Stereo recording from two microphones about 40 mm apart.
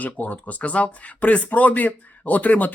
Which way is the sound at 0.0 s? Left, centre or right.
Left.